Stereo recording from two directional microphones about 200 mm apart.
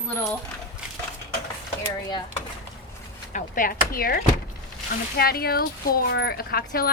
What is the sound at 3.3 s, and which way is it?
Speech, 45° left (ahead or behind).